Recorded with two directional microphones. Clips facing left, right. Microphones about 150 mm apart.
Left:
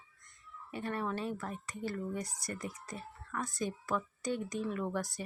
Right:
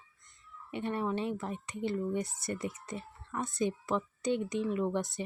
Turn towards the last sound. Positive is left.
turn(degrees=-20)  # may be behind; listen again after turning